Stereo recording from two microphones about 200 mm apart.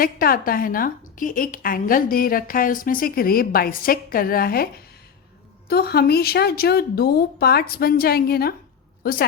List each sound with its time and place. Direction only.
0.0 s a woman's voice: 45° left (ahead or behind)